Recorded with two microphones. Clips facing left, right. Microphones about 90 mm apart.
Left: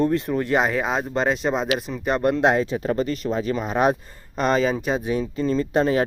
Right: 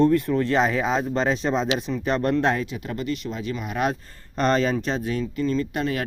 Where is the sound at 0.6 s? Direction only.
Centre (ahead or behind); by 2.6 s 20° left (ahead or behind).